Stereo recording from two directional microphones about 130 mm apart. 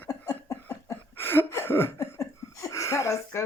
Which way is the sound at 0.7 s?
15° left (ahead or behind).